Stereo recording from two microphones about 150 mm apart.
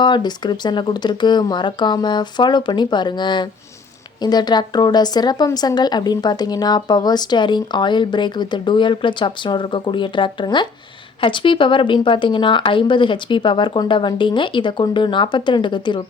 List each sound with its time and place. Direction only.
0.0 s a woman's voice: 30° left (ahead or behind)